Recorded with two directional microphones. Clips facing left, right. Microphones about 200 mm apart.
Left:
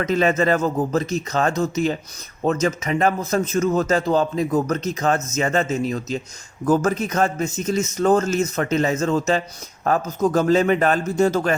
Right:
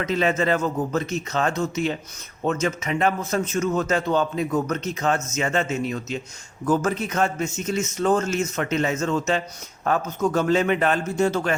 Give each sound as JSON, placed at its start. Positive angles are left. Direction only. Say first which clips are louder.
{"t": 0.0, "sound": "a man's voice", "louder": "left 3 dB", "side_deg": 45}